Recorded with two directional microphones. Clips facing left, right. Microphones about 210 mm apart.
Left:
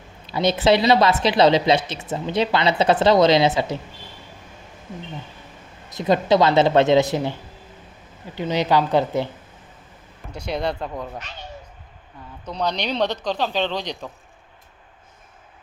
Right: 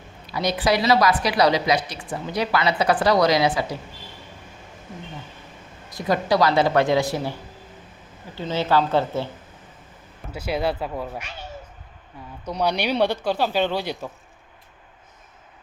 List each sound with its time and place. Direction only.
0.3 s a woman's voice: 25° left (ahead or behind)
5.9 s a woman's voice: 20° left (ahead or behind)
8.4 s speech: 15° left (ahead or behind)
10.3 s speech: 5° right (ahead or behind)
12.5 s speech: 10° right (ahead or behind)